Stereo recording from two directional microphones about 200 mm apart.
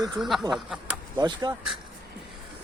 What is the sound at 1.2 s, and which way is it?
Speech, 20° right (ahead or behind).